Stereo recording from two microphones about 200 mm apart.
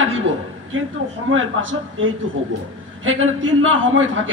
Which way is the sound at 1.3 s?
75° right (ahead or behind).